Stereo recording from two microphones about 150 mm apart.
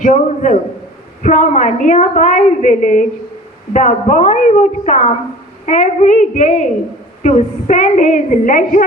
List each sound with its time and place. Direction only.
0.0 s a woman's voice: 55° left (ahead or behind)